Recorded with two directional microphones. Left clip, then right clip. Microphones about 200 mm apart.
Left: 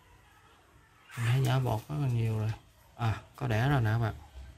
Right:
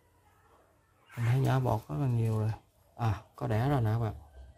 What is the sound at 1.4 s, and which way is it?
Speech, 20° right (ahead or behind).